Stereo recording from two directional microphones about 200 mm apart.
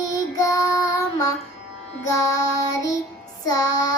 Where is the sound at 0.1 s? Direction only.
15° left (ahead or behind).